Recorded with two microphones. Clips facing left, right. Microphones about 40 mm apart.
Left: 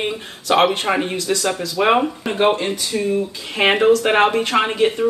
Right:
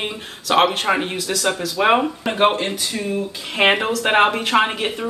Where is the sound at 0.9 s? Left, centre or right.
Centre.